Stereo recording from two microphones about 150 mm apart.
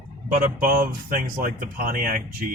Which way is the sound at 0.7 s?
70° right (ahead or behind).